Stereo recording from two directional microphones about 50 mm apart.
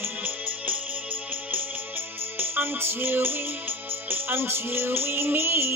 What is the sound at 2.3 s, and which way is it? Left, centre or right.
Music, right.